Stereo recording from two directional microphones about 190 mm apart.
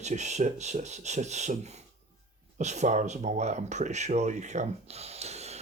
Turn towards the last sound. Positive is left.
turn(degrees=-35)  # may be behind; listen again after turning